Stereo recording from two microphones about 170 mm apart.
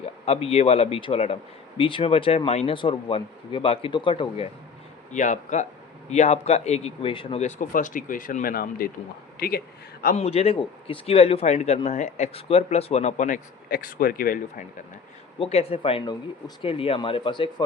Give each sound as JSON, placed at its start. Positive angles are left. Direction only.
{"t": 0.3, "sound": "speech", "side_deg": 35}
{"t": 5.1, "sound": "a man's voice", "side_deg": 45}
{"t": 10.2, "sound": "speech", "side_deg": 35}
{"t": 15.4, "sound": "speech", "side_deg": 35}